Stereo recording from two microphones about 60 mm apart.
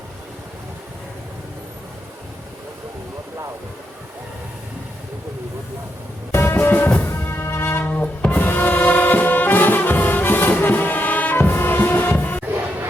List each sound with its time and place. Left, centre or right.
6.3 s music: left
7.1 s music: left
7.9 s music: left